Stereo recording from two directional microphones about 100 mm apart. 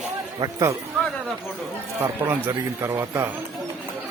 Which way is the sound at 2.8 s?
25° right (ahead or behind).